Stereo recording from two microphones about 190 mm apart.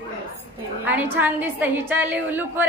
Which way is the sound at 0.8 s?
10° right (ahead or behind).